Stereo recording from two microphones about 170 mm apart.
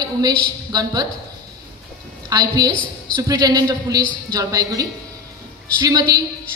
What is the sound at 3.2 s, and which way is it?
A woman's voice, 20° right (ahead or behind).